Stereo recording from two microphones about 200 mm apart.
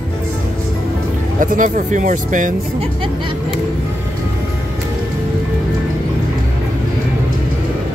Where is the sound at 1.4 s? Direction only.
40° right (ahead or behind).